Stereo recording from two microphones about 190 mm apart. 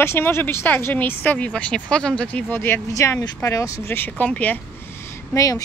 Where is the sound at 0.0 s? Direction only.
10° left (ahead or behind).